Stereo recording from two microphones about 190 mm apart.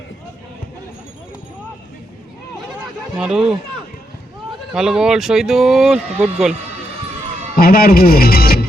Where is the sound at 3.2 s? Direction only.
5° right (ahead or behind).